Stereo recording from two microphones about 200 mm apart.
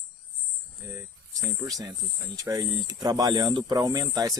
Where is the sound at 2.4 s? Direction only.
15° right (ahead or behind).